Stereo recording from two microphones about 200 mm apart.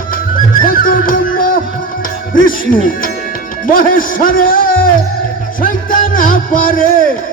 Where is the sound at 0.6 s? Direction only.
45° left (ahead or behind).